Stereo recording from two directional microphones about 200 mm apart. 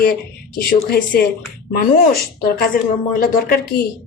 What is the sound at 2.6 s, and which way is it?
Speech, 45° left (ahead or behind).